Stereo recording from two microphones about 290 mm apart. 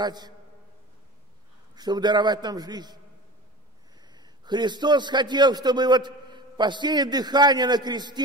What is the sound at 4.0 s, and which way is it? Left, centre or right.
A man's voice, centre.